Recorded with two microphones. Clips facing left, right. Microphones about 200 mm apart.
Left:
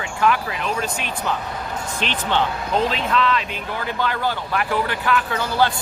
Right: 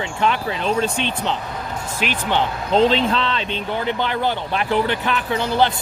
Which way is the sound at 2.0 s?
10° right (ahead or behind).